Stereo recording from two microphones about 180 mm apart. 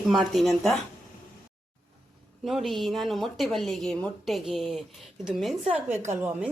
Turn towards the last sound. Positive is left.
turn(degrees=-10)  # may be behind; listen again after turning